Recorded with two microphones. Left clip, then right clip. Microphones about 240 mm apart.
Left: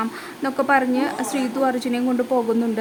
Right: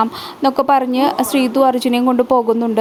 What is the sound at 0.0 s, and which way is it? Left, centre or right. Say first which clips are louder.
A woman's voice: right 10 dB; right.